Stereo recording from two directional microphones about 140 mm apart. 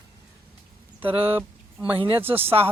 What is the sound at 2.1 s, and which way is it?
Speech, 15° right (ahead or behind).